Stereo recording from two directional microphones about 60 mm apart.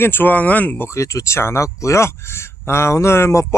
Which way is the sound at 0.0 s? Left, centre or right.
Left.